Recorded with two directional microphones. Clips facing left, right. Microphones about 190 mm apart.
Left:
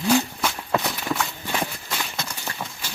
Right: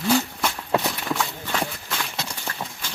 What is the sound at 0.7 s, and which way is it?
Clip-clop, 5° left (ahead or behind).